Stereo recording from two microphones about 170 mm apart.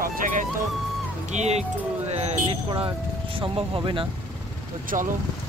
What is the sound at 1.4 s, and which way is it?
Speech, 40° right (ahead or behind).